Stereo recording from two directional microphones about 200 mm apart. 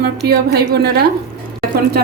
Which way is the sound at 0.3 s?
55° right (ahead or behind).